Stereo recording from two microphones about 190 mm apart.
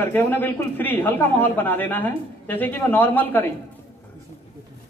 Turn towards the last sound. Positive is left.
turn(degrees=10)  # may be behind; listen again after turning